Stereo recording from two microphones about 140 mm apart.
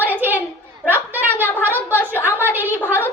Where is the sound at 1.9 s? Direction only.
15° left (ahead or behind).